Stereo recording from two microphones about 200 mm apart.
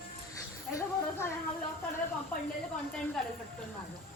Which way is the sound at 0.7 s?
15° left (ahead or behind).